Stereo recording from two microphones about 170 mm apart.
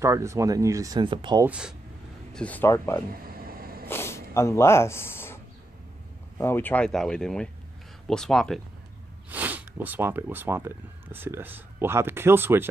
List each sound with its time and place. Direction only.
0.0 s speech: 15° right (ahead or behind)
1.4 s speech: 5° right (ahead or behind)
2.3 s speech: 10° left (ahead or behind)
3.3 s vehicle: 60° right (ahead or behind)
3.9 s snort: 15° left (ahead or behind)
6.3 s speech: 10° left (ahead or behind)
9.3 s speech: 10° right (ahead or behind)